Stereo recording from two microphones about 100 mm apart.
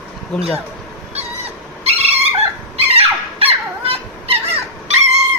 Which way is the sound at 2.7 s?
80° right.